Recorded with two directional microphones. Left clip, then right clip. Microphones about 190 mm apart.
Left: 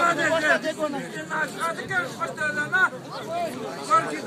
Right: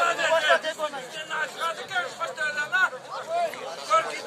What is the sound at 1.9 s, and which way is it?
Speech, 35° right (ahead or behind).